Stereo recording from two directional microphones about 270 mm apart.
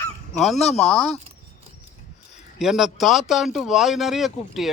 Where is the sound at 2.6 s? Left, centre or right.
Centre.